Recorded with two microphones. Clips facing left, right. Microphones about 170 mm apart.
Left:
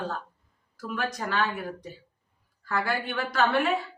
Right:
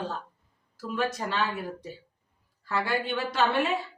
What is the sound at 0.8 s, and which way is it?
Speech, 25° right (ahead or behind).